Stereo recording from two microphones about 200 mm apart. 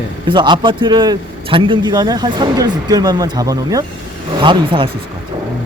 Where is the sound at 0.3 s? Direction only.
25° right (ahead or behind).